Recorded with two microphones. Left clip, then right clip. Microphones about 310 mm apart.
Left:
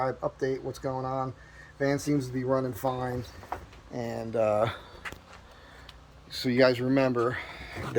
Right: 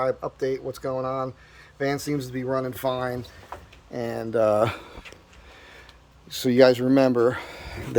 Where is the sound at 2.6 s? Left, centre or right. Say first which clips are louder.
Right 4 dB; centre; by 4.9 s right.